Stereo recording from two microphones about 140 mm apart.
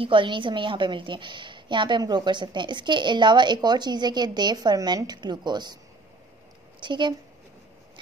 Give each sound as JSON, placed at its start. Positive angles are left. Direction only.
{"t": 0.0, "sound": "a woman's voice", "side_deg": -35}
{"t": 6.8, "sound": "speech", "side_deg": -35}